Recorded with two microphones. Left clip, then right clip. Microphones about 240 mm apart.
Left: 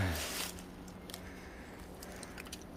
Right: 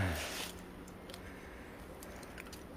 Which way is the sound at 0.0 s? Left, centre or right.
Centre.